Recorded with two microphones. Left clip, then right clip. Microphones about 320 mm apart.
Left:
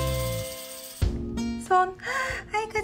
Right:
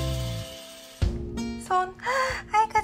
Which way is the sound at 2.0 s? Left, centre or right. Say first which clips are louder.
Right 3 dB; right.